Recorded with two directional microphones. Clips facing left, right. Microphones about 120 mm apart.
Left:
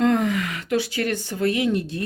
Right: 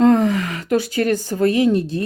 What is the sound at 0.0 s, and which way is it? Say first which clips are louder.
Speech: right 6 dB; 35° right (ahead or behind).